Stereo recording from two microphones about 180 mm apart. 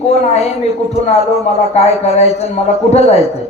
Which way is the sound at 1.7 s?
35° left (ahead or behind).